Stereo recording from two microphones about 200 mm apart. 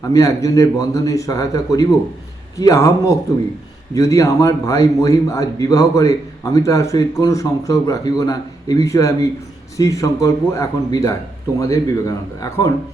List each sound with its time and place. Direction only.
0.0 s a man's voice: 15° left (ahead or behind)
3.9 s a man's voice: 15° left (ahead or behind)